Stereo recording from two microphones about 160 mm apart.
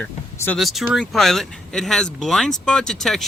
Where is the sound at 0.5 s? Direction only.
Centre (ahead or behind).